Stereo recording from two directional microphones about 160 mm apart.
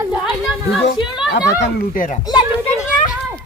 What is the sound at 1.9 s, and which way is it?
Speech, 55° left (ahead or behind).